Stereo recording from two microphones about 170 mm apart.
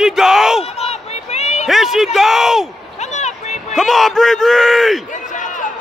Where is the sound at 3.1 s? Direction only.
45° left (ahead or behind).